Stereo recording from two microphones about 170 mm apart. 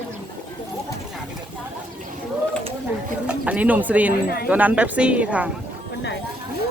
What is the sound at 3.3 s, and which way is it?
A woman's voice, 10° right (ahead or behind).